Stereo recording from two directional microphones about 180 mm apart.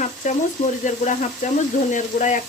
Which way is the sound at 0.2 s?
45° left (ahead or behind).